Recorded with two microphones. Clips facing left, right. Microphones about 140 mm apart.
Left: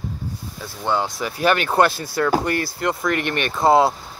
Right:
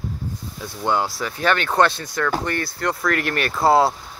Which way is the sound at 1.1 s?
15° left (ahead or behind).